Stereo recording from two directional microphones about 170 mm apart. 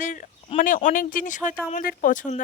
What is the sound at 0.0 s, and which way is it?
Speech, 50° left (ahead or behind).